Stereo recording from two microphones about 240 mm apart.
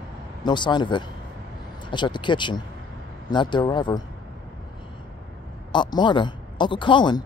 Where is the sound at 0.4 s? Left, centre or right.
Centre.